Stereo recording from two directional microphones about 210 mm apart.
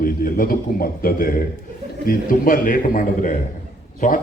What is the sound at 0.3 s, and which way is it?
A man's voice, 45° left (ahead or behind).